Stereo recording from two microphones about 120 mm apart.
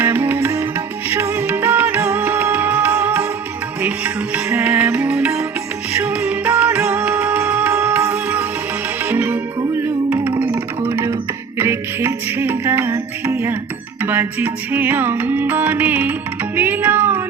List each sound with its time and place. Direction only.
0.0 s music: 15° right (ahead or behind)
9.8 s a sound: 15° right (ahead or behind)
10.4 s music: 20° right (ahead or behind)